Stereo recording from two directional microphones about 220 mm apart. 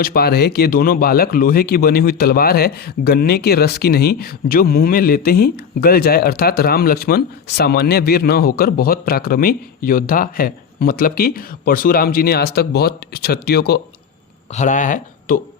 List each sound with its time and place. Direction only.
0.0 s speech: 45° left (ahead or behind)
14.5 s speech: 35° left (ahead or behind)